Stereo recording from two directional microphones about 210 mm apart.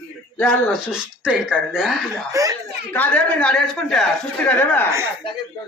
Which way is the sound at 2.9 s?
5° left (ahead or behind).